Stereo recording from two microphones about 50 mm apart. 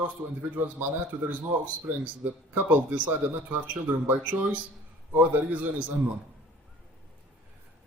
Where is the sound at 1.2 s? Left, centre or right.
Right.